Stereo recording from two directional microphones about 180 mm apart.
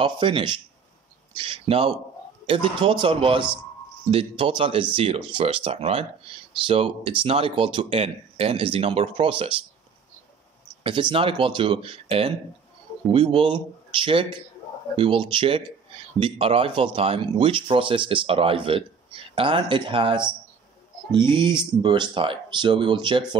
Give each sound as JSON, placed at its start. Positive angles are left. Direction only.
{"t": 0.0, "sound": "speech", "side_deg": -30}
{"t": 10.8, "sound": "speech", "side_deg": -25}